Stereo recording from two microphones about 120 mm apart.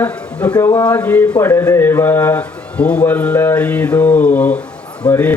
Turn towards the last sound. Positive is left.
turn(degrees=15)  # may be behind; listen again after turning